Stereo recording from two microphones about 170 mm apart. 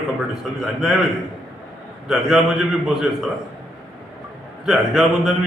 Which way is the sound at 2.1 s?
5° right (ahead or behind).